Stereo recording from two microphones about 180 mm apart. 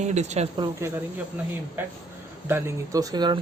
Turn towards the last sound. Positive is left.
turn(degrees=-25)  # may be behind; listen again after turning